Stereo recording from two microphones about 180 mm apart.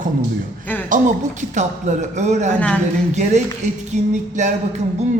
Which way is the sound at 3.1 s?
40° right (ahead or behind).